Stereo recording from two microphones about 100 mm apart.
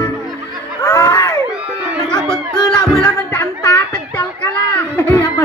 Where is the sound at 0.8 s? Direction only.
35° left (ahead or behind).